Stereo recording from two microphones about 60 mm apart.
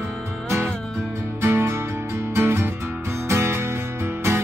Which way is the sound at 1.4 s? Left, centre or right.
Right.